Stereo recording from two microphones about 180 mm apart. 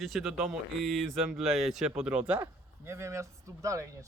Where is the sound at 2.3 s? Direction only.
20° right (ahead or behind).